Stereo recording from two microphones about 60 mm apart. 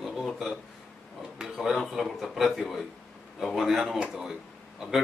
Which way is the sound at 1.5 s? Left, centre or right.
Centre.